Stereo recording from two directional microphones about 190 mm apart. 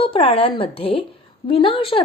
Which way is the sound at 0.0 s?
30° left (ahead or behind).